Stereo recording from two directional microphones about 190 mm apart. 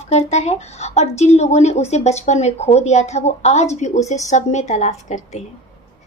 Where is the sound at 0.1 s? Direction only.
35° left (ahead or behind).